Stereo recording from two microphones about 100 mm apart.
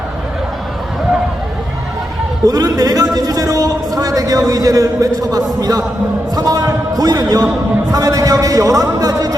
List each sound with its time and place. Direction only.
2.5 s a man's voice: 40° right (ahead or behind)
6.3 s a sound: 40° right (ahead or behind)
7.9 s a man's voice: 35° right (ahead or behind)